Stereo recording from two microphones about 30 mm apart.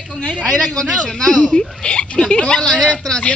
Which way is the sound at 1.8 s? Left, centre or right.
Left.